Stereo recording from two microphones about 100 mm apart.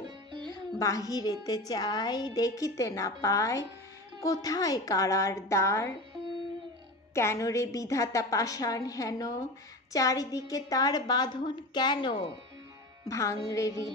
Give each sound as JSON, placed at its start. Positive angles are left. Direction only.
{"t": 0.3, "sound": "music", "side_deg": -50}
{"t": 0.7, "sound": "a woman's voice", "side_deg": 35}
{"t": 7.2, "sound": "a woman's voice", "side_deg": 30}
{"t": 13.1, "sound": "a woman's voice", "side_deg": 30}